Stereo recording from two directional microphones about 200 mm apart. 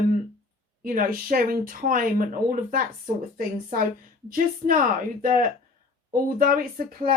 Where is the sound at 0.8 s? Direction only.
45° right (ahead or behind).